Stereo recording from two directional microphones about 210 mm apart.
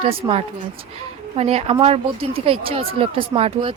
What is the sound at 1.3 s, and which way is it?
Speech, 30° right (ahead or behind).